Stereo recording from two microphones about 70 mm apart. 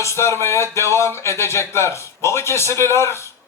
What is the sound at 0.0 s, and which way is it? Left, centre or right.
A man's voice, left.